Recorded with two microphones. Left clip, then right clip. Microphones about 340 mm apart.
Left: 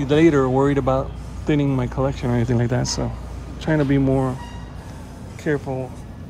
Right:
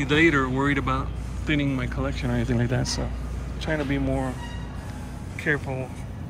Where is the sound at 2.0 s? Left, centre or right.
Right.